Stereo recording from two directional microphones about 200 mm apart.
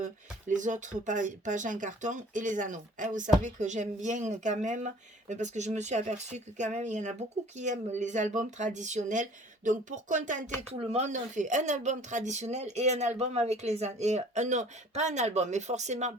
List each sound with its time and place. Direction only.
0.0 s speech: 40° right (ahead or behind)